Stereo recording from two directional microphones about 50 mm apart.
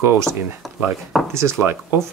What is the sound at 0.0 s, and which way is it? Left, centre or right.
Speech, right.